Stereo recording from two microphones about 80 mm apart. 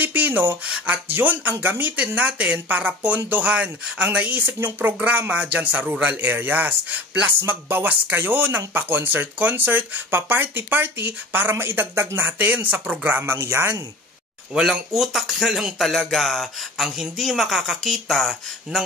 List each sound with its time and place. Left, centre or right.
0.0 s a sound: right
0.7 s speech: centre
13.2 s speech: right
14.5 s speech: centre